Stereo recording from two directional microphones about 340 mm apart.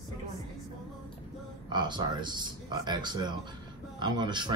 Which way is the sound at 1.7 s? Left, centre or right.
Centre.